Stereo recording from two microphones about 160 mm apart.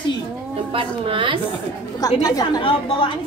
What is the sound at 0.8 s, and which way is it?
Speech, 30° right (ahead or behind).